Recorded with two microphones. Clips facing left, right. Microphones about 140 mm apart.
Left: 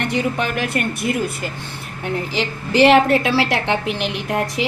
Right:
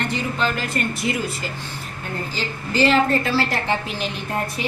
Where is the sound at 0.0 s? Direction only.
65° left (ahead or behind).